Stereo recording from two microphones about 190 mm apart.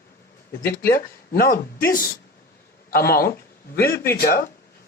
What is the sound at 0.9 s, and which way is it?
A man's voice, 50° left (ahead or behind).